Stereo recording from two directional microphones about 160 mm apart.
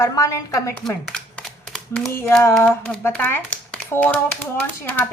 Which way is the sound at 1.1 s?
5° left (ahead or behind).